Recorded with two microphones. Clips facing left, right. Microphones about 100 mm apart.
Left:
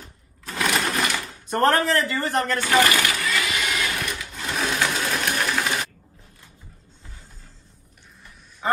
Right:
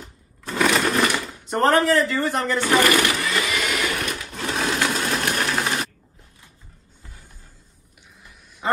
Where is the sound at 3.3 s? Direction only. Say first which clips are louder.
Right 1 dB; 35° right (ahead or behind).